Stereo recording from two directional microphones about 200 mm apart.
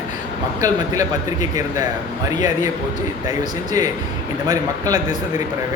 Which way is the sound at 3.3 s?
20° right (ahead or behind).